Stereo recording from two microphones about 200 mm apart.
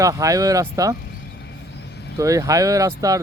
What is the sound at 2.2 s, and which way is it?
Speech, 15° right (ahead or behind).